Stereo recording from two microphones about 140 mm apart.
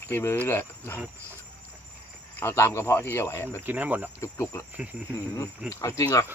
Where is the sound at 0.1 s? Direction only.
20° left (ahead or behind).